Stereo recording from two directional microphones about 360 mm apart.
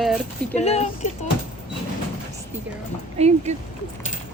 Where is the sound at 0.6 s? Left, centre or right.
Centre.